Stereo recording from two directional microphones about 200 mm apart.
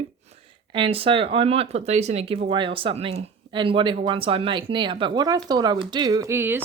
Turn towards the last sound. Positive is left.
turn(degrees=-10)  # may be behind; listen again after turning